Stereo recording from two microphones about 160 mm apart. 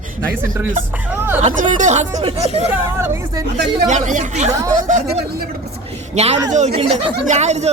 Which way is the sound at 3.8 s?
50° right (ahead or behind).